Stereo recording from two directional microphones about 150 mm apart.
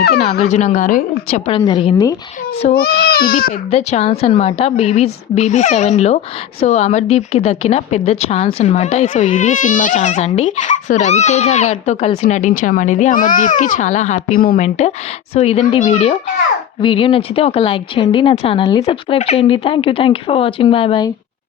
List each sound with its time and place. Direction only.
0.2 s speech: 45° left (ahead or behind); by 1.0 s 60° left (ahead or behind)
1.3 s speech: 40° left (ahead or behind)
1.6 s speech: 30° left (ahead or behind)
2.7 s speech: 90° left
3.7 s speech: 45° left (ahead or behind); by 14.6 s 75° left (ahead or behind)
14.6 s speech: 50° left (ahead or behind)